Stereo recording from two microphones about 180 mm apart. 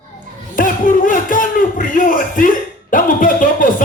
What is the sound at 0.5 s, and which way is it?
A man's voice, 50° left (ahead or behind).